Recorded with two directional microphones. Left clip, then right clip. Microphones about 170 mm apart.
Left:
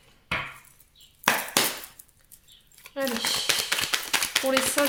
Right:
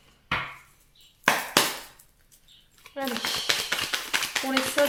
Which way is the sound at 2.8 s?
30° left (ahead or behind).